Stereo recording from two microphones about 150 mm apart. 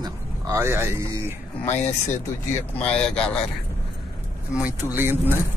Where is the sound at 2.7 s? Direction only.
5° left (ahead or behind).